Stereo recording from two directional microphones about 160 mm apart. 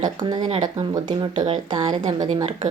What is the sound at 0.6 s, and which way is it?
Speech, 25° right (ahead or behind).